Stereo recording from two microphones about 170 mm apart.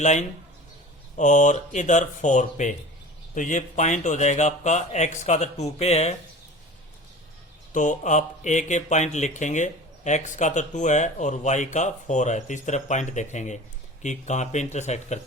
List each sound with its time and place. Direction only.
0.0 s speech: 45° left (ahead or behind)
7.7 s speech: 45° left (ahead or behind)